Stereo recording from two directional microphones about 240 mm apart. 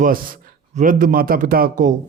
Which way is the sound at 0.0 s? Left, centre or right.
Right.